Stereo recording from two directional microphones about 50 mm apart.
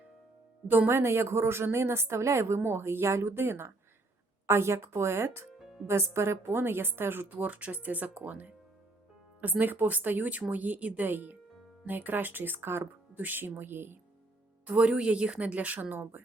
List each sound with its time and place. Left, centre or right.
0.7 s a woman's voice: right
0.9 s speech: right
2.6 s speech: right
5.5 s music: centre
5.9 s a woman's voice: right
14.8 s speech: centre; by 16.2 s right